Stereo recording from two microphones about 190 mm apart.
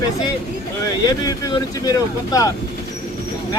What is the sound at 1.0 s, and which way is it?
Speech, 20° left (ahead or behind).